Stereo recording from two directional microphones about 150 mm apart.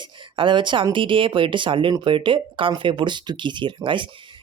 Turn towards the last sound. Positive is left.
turn(degrees=-35)  # may be behind; listen again after turning